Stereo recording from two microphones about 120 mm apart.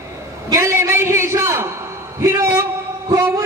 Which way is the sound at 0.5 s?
25° right (ahead or behind).